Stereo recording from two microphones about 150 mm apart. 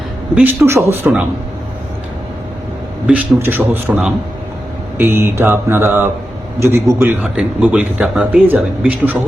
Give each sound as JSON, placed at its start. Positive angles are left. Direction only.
{"t": 0.3, "sound": "speech", "side_deg": -15}
{"t": 3.1, "sound": "a man's voice", "side_deg": -10}
{"t": 7.0, "sound": "speech", "side_deg": -5}